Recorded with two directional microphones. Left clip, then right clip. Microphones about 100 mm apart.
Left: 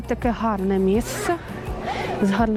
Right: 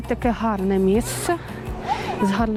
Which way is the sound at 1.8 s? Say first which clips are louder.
Right 2 dB; 5° right (ahead or behind).